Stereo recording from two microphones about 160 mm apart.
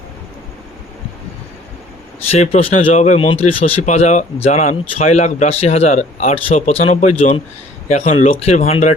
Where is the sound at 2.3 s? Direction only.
40° left (ahead or behind).